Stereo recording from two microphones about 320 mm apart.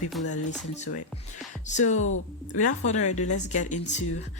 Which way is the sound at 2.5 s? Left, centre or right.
Left.